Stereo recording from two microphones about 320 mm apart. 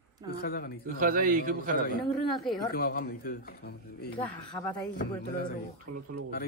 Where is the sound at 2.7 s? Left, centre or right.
Left.